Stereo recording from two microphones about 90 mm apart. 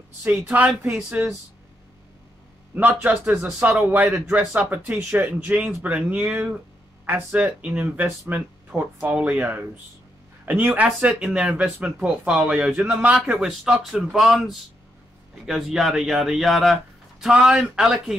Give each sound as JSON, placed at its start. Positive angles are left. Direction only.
{"t": 0.2, "sound": "speech", "side_deg": -20}
{"t": 2.7, "sound": "speech", "side_deg": -20}